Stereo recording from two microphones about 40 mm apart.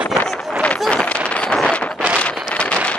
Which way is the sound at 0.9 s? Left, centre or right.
Left.